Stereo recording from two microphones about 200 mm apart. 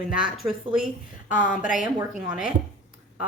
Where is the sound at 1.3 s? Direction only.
40° left (ahead or behind).